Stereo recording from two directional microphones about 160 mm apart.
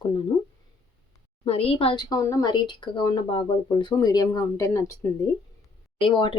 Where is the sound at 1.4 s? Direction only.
35° left (ahead or behind); by 5.2 s 20° left (ahead or behind).